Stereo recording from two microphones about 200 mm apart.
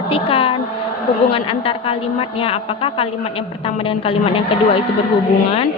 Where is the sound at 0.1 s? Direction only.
25° left (ahead or behind).